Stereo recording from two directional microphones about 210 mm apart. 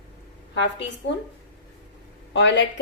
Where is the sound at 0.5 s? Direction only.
55° left (ahead or behind).